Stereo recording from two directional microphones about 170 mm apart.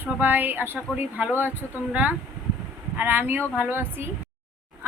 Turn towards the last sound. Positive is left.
turn(degrees=-15)  # may be behind; listen again after turning